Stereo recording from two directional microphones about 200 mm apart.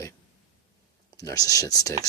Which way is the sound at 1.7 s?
15° left (ahead or behind).